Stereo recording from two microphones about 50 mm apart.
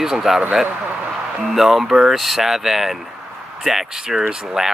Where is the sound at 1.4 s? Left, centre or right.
Centre.